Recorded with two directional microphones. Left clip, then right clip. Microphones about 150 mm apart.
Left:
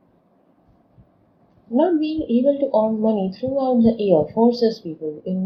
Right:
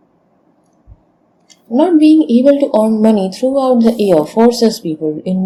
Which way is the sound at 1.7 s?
60° right (ahead or behind).